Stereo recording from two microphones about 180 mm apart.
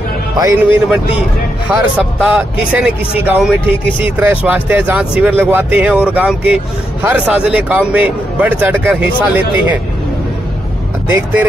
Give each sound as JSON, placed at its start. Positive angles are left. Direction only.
{"t": 0.4, "sound": "a man's voice", "side_deg": -20}
{"t": 1.7, "sound": "a man's voice", "side_deg": -5}
{"t": 11.1, "sound": "a man's voice", "side_deg": -10}